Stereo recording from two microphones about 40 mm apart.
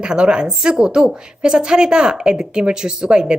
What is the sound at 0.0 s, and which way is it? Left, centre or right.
A woman's voice, right.